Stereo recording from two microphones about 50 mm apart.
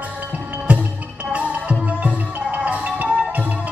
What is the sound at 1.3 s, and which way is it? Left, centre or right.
Music, right.